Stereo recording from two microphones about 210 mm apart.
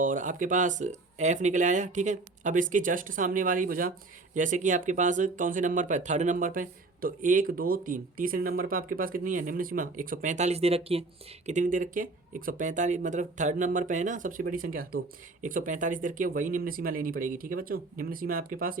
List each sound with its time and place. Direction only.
0.0 s speech: 40° right (ahead or behind)